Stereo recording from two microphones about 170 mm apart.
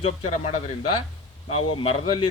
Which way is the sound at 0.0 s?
40° left (ahead or behind).